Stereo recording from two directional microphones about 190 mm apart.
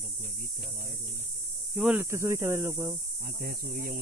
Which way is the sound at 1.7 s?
5° right (ahead or behind).